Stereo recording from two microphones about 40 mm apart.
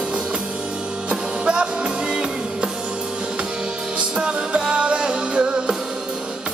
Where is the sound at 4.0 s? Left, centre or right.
Right.